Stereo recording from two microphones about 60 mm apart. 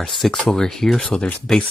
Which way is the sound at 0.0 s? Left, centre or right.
Centre.